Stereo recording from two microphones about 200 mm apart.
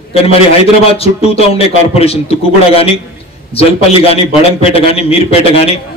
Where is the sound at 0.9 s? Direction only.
30° left (ahead or behind).